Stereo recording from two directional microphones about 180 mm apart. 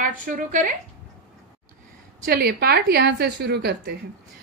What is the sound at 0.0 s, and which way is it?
Speech, 50° right (ahead or behind).